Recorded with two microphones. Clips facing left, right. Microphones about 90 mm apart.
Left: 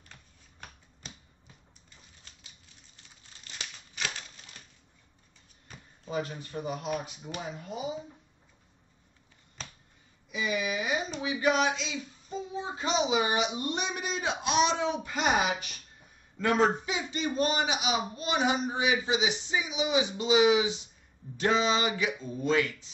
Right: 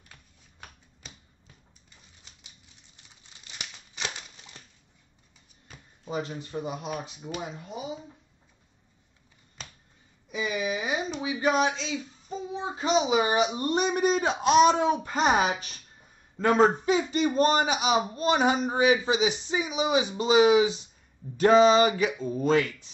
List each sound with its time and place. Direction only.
0.1 s typewriter: 5° right (ahead or behind)
3.4 s crumpling: 20° right (ahead or behind)
6.0 s speech: 20° right (ahead or behind)
6.8 s speech: 5° right (ahead or behind)
10.3 s a sound: 35° right (ahead or behind)
11.1 s speech: 30° right (ahead or behind)
13.1 s a man's voice: 40° right (ahead or behind)